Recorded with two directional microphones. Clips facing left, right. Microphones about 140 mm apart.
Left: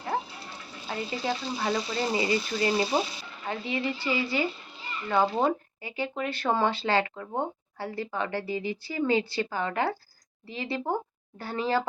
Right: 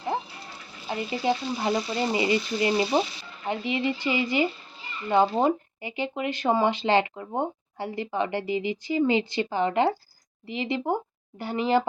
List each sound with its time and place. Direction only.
0.9 s speech: 20° right (ahead or behind)